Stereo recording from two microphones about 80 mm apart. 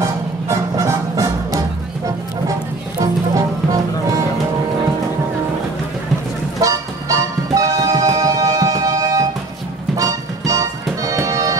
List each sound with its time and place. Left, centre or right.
0.0 s music: right
3.0 s music: right
6.6 s music: right